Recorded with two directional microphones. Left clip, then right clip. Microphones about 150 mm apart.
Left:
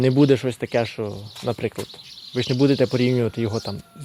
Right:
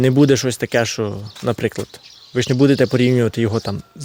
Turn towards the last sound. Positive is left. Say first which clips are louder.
# right 5 dB
turn(degrees=-45)  # may be behind; listen again after turning